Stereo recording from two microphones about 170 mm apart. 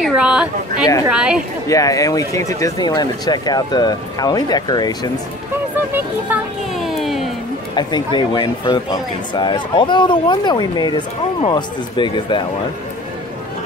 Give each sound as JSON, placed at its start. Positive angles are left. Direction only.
{"t": 0.0, "sound": "a woman's voice", "side_deg": -5}
{"t": 1.7, "sound": "speech", "side_deg": 20}
{"t": 6.2, "sound": "a sound", "side_deg": -5}
{"t": 7.7, "sound": "speech", "side_deg": 25}